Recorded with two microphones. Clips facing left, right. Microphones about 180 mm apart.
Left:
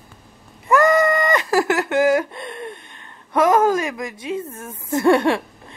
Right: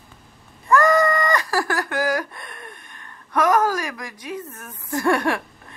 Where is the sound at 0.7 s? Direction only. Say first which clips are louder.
Left 2 dB; 20° left (ahead or behind).